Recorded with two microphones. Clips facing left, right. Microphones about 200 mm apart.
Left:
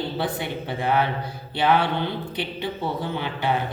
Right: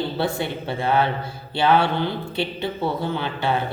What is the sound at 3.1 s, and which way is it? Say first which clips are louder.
Speech: right 1 dB; 15° left (ahead or behind).